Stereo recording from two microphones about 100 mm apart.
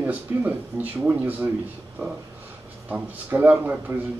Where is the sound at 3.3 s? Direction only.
15° right (ahead or behind).